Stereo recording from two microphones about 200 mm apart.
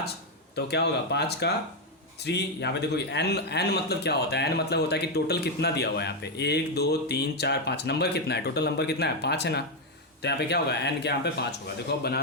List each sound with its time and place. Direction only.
0.5 s a man's voice: 55° left (ahead or behind)